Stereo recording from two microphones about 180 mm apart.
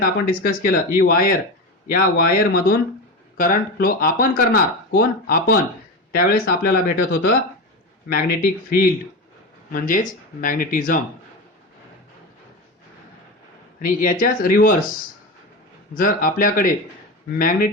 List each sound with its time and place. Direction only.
0.0 s speech: 55° left (ahead or behind)
13.7 s speech: 50° left (ahead or behind)
16.0 s speech: 50° left (ahead or behind)